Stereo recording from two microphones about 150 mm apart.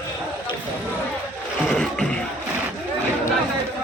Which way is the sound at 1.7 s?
5° left (ahead or behind).